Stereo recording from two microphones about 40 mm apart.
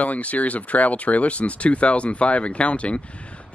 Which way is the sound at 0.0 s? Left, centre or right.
Left.